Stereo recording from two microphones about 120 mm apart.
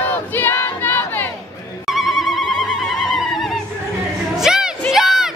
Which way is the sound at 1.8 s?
Centre (ahead or behind).